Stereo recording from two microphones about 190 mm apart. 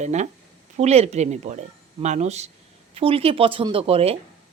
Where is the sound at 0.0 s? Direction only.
35° right (ahead or behind).